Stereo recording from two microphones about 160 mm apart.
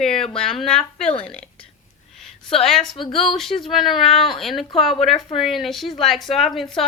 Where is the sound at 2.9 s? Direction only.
35° left (ahead or behind).